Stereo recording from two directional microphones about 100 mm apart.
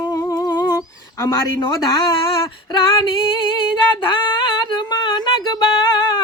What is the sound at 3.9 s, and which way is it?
Singing, 55° left (ahead or behind).